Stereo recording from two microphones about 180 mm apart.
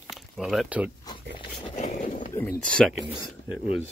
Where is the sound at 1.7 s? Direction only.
45° left (ahead or behind).